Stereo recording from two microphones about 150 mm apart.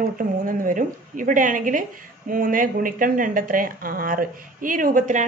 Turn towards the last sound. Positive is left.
turn(degrees=-60)  # may be behind; listen again after turning